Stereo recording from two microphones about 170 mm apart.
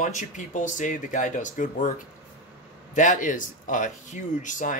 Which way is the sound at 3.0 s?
50° left (ahead or behind).